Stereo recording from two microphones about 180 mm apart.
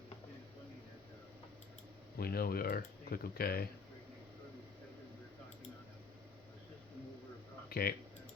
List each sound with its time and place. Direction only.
2.1 s speech: 55° left (ahead or behind)
7.7 s speech: 60° left (ahead or behind)